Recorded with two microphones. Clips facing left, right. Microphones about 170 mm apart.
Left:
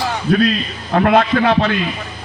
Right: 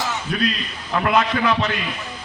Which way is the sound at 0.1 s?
55° left (ahead or behind).